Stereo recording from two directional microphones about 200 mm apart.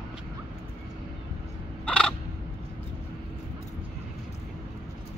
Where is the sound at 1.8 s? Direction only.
5° left (ahead or behind).